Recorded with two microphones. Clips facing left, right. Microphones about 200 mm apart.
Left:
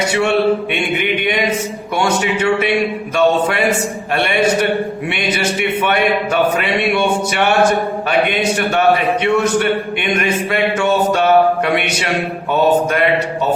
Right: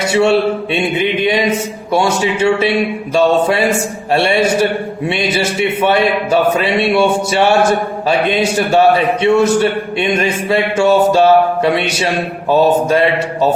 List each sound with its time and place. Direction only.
0.1 s a man's voice: 25° right (ahead or behind)